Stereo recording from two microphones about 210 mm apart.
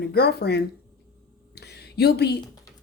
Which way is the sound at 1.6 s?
50° left (ahead or behind).